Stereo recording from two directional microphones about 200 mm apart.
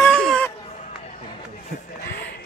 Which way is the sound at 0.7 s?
35° left (ahead or behind).